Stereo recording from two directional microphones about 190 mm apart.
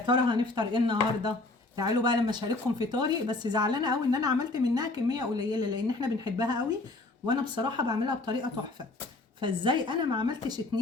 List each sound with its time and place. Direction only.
0.0 s speech: 25° right (ahead or behind)